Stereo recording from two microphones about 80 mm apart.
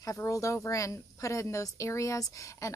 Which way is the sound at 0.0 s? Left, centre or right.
Left.